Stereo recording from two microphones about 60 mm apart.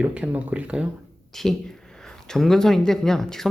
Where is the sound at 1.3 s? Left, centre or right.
Centre.